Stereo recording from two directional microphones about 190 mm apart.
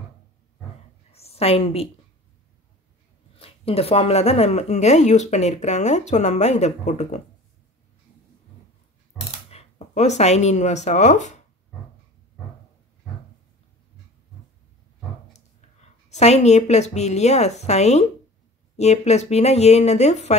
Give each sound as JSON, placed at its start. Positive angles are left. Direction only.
{"t": 1.1, "sound": "a sound", "side_deg": 30}
{"t": 3.3, "sound": "speech", "side_deg": 30}
{"t": 9.5, "sound": "speech", "side_deg": 35}
{"t": 15.3, "sound": "a woman's voice", "side_deg": 35}